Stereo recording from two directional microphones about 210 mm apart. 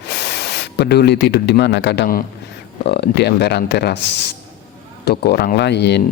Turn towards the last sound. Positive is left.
turn(degrees=55)  # may be behind; listen again after turning